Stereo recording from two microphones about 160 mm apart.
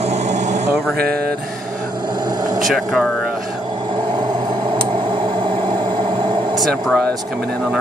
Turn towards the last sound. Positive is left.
turn(degrees=0)  # may be behind; listen again after turning